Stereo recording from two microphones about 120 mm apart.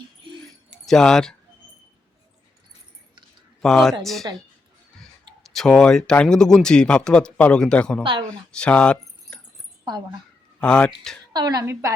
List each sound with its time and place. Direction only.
0.9 s speech: 5° left (ahead or behind)
3.6 s speech: 5° left (ahead or behind)
4.9 s speech: centre (ahead or behind)
10.6 s speech: 10° left (ahead or behind)
11.3 s a woman's voice: 35° right (ahead or behind)
11.6 s a woman's voice: 25° right (ahead or behind)